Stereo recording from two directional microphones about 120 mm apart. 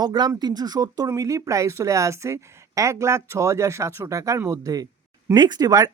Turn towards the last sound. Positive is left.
turn(degrees=-30)  # may be behind; listen again after turning